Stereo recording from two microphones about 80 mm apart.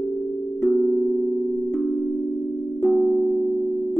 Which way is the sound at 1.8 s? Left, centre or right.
Centre.